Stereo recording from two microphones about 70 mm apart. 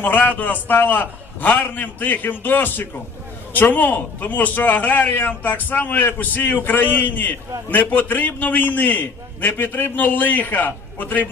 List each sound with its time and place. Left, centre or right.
0.0 s a man's voice: left